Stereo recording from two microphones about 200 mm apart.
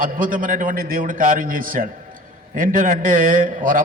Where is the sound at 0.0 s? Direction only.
45° right (ahead or behind).